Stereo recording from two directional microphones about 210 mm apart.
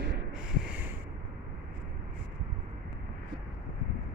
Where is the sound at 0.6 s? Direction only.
5° right (ahead or behind).